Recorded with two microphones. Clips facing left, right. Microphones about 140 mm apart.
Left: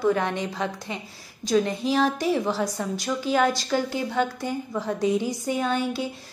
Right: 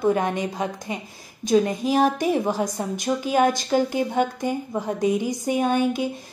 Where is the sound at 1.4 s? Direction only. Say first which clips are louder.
Right 3 dB; 20° right (ahead or behind).